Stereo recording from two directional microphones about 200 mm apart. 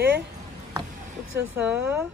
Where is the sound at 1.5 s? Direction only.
5° right (ahead or behind).